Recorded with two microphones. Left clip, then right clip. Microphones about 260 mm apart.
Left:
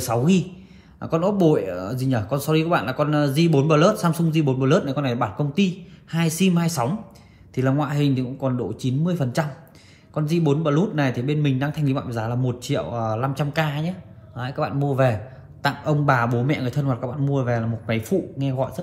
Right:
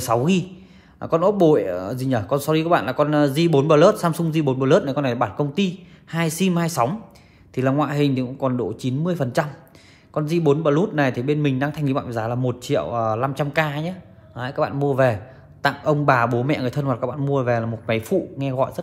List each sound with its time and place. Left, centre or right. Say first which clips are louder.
0.0 s speech: right 2 dB; right